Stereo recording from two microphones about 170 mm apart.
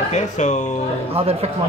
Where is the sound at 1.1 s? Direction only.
35° right (ahead or behind).